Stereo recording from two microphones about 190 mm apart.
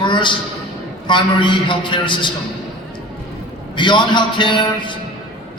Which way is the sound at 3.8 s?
25° left (ahead or behind).